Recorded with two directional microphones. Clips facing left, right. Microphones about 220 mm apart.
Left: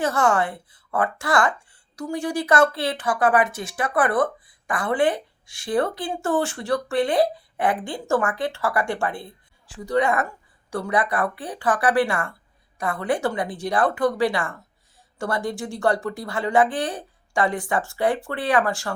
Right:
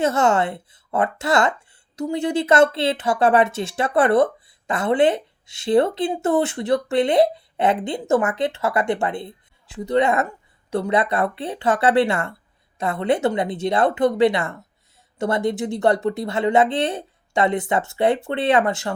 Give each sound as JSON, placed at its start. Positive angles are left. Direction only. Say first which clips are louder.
{"t": 0.0, "sound": "speech", "louder": "right 3 dB", "side_deg": -25}